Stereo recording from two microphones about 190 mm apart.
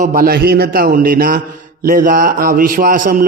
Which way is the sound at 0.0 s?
50° right (ahead or behind).